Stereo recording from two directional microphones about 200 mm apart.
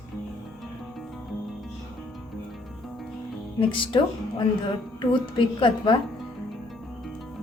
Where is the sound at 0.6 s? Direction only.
Centre (ahead or behind).